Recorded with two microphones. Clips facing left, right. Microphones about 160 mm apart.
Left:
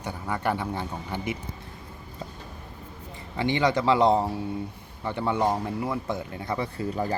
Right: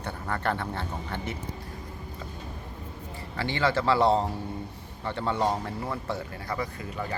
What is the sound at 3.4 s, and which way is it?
Speech, 20° left (ahead or behind).